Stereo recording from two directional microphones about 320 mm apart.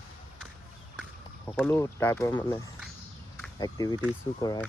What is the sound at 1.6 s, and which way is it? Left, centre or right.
Speech, centre.